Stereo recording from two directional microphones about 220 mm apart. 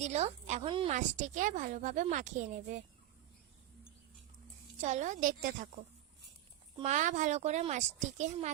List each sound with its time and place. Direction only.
0.0 s a woman's voice: 30° right (ahead or behind)
4.8 s a woman's voice: 30° right (ahead or behind)
6.7 s a woman's voice: 30° right (ahead or behind)